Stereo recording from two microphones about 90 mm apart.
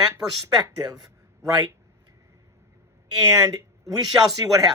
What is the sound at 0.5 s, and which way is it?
Speech, 40° right (ahead or behind).